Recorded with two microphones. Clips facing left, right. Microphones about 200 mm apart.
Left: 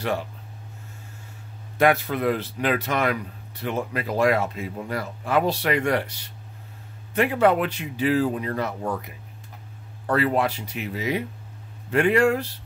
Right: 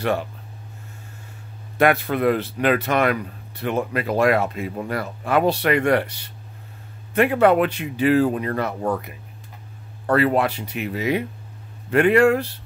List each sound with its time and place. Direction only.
1.8 s speech: 60° right (ahead or behind)
7.2 s speech: 60° right (ahead or behind)